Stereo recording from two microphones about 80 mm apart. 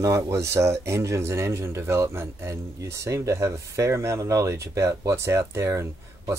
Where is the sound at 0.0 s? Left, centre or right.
Right.